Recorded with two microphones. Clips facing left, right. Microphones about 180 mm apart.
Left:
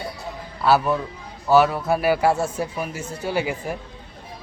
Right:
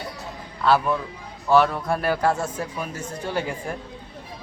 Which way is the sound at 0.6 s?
5° left (ahead or behind).